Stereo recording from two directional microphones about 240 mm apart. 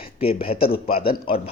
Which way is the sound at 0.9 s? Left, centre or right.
Left.